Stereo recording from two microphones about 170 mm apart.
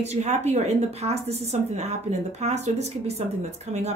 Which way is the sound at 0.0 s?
40° right (ahead or behind).